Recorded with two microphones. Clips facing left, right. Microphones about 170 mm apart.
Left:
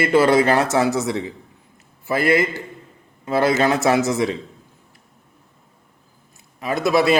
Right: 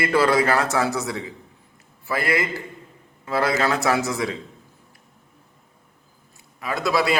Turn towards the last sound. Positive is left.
turn(degrees=25)  # may be behind; listen again after turning